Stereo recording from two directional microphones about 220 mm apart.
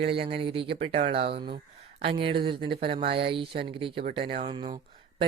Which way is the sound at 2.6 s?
45° right (ahead or behind).